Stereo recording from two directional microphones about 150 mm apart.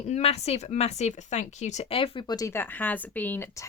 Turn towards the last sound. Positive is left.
turn(degrees=15)  # may be behind; listen again after turning